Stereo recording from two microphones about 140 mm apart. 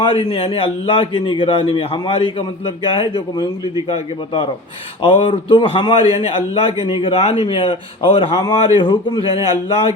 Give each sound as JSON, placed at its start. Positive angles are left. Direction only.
{"t": 0.0, "sound": "a man's voice", "side_deg": 40}
{"t": 5.0, "sound": "a man's voice", "side_deg": 35}